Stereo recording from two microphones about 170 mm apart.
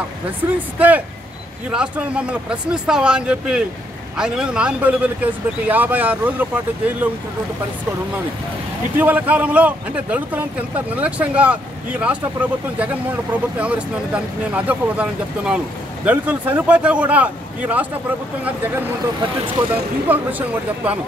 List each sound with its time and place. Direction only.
0.7 s speech: 10° right (ahead or behind)
8.9 s speech: 10° right (ahead or behind)
20.1 s speech: 10° right (ahead or behind)